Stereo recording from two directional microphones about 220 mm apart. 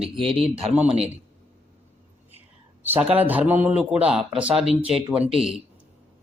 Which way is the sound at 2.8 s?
10° right (ahead or behind).